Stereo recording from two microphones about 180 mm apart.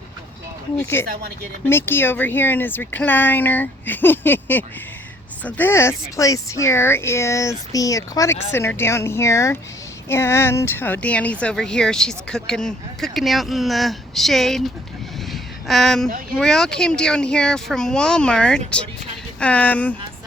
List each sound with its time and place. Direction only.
0.8 s speech: 15° left (ahead or behind)
1.0 s speech: 55° right (ahead or behind)
1.6 s a woman's voice: 10° left (ahead or behind)
15.3 s a sound: centre (ahead or behind)
16.4 s a woman's voice: 5° left (ahead or behind)